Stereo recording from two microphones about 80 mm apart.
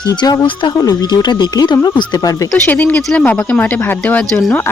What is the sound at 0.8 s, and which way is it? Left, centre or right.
Speech, left.